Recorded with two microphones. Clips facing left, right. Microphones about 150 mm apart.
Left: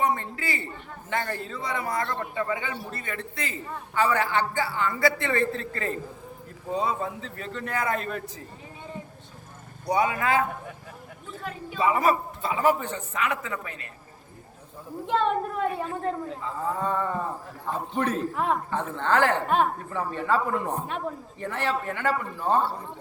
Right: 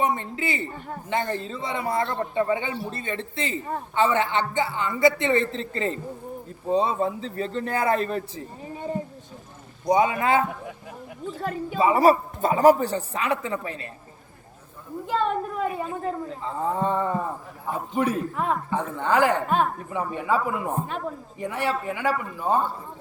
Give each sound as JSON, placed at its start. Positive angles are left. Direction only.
{"t": 0.0, "sound": "a man's voice", "side_deg": -20}
{"t": 10.0, "sound": "a man's voice", "side_deg": -25}
{"t": 11.3, "sound": "speech", "side_deg": -45}
{"t": 11.8, "sound": "a man's voice", "side_deg": -30}
{"t": 15.0, "sound": "a woman's voice", "side_deg": 0}
{"t": 16.4, "sound": "a man's voice", "side_deg": -30}
{"t": 18.7, "sound": "a man's voice", "side_deg": -10}
{"t": 19.5, "sound": "a woman's voice", "side_deg": 0}
{"t": 19.9, "sound": "a man's voice", "side_deg": -15}